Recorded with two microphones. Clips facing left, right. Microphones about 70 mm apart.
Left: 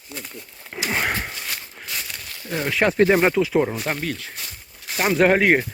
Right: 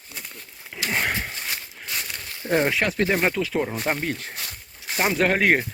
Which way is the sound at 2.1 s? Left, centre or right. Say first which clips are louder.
Right 8 dB; right.